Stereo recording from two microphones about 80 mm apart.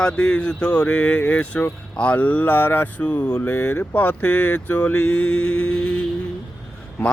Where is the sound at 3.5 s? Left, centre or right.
Left.